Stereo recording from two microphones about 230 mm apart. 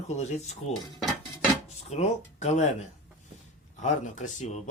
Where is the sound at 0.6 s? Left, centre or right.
Left.